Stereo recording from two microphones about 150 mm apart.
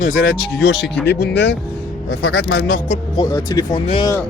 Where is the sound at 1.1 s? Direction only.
90° left.